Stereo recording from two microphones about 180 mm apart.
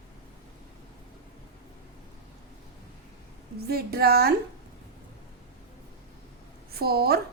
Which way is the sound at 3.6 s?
60° right (ahead or behind).